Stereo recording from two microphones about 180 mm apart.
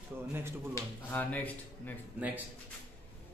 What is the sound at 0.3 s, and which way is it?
Speech, 15° right (ahead or behind).